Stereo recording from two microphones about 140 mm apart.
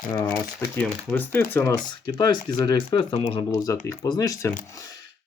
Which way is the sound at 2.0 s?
30° left (ahead or behind).